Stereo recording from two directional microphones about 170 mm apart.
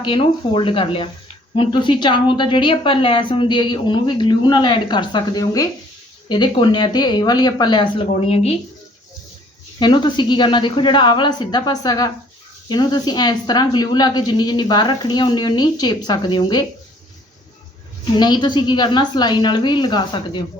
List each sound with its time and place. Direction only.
0.0 s a woman's voice: 30° left (ahead or behind)
9.8 s a woman's voice: 25° left (ahead or behind)
18.2 s a woman's voice: 25° left (ahead or behind)